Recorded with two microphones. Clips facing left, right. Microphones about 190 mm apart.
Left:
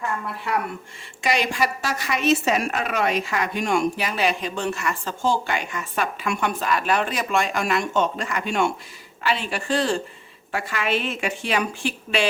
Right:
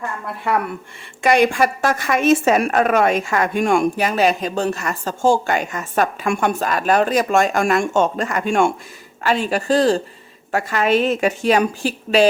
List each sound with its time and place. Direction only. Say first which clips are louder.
1.2 s a woman's voice: right 8 dB; 55° right (ahead or behind)